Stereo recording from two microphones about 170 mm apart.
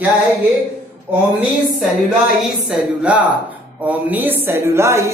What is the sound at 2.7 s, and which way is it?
Speech, 5° right (ahead or behind).